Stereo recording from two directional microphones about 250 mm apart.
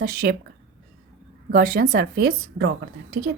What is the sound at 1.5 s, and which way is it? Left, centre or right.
Speech, right.